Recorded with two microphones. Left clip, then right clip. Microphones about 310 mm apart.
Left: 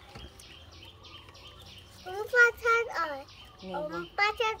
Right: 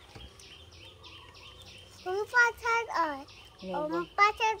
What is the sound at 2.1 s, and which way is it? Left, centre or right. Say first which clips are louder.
A child's voice: left 2 dB; centre.